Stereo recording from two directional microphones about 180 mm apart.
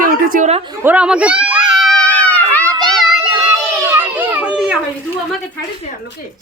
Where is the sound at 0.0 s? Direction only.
50° right (ahead or behind).